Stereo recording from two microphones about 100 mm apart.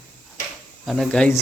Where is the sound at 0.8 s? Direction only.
5° left (ahead or behind).